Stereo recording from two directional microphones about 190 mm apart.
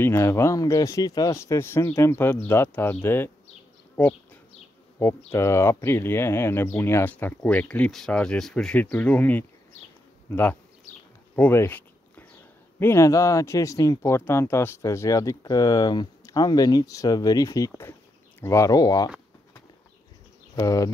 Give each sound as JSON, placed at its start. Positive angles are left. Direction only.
{"t": 0.0, "sound": "speech", "side_deg": 15}
{"t": 3.9, "sound": "bee", "side_deg": 10}
{"t": 4.9, "sound": "speech", "side_deg": 15}
{"t": 11.3, "sound": "a sound", "side_deg": 10}
{"t": 12.7, "sound": "speech", "side_deg": 15}
{"t": 20.5, "sound": "speech", "side_deg": 20}